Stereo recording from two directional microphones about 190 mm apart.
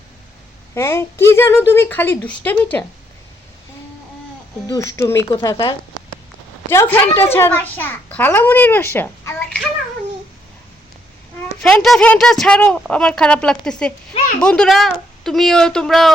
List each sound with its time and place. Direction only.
0.7 s a child's voice: 15° left (ahead or behind)
4.6 s a child's voice: 15° left (ahead or behind)
11.6 s speech: centre (ahead or behind)